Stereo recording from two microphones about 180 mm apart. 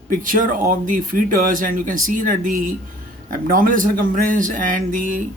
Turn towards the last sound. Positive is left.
turn(degrees=-50)  # may be behind; listen again after turning